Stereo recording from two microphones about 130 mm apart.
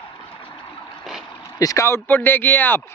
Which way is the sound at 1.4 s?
25° left (ahead or behind).